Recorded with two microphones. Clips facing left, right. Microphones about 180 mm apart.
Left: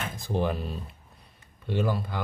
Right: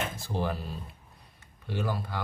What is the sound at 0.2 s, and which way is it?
Speech, 20° left (ahead or behind).